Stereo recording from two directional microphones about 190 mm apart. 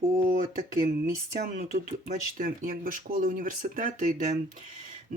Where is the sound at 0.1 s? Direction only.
50° right (ahead or behind).